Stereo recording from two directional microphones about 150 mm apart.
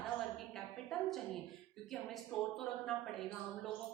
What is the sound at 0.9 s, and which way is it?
Speech, centre (ahead or behind).